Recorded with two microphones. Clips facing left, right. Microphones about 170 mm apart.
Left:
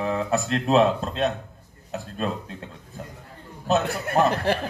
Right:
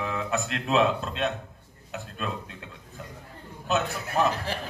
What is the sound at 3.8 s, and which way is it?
Speech, 65° left (ahead or behind).